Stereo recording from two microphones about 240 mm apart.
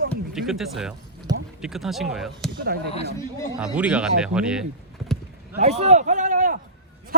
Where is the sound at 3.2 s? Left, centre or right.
Centre.